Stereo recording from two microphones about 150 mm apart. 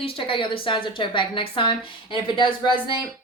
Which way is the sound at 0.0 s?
35° left (ahead or behind).